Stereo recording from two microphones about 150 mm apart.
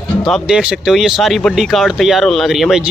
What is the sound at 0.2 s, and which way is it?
Speech, centre (ahead or behind).